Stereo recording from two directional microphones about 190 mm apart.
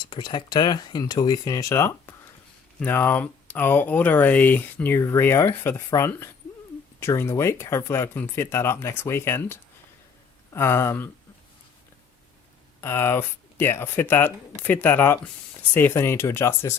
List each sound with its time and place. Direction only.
0.0 s speech: 25° left (ahead or behind)
12.8 s speech: 10° left (ahead or behind)